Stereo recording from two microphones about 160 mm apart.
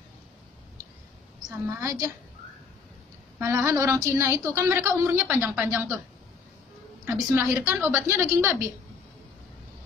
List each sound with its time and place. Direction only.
1.5 s a woman's voice: 15° right (ahead or behind)
3.3 s a woman's voice: 15° right (ahead or behind)
7.1 s a woman's voice: 15° right (ahead or behind)